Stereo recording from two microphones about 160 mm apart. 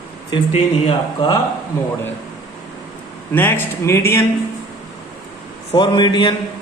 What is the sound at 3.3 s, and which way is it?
Speech, 15° left (ahead or behind).